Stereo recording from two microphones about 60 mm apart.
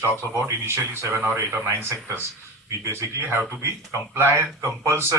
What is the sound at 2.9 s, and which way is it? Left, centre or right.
Speech, right.